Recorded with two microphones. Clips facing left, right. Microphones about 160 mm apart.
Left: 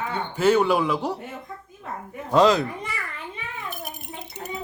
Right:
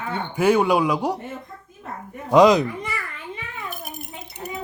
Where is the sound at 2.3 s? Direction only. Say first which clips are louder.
Right 4 dB; 15° right (ahead or behind).